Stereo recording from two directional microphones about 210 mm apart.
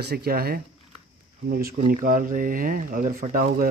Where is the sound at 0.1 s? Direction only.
45° right (ahead or behind).